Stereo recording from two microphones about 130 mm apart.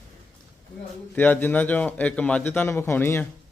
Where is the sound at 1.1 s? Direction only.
15° left (ahead or behind).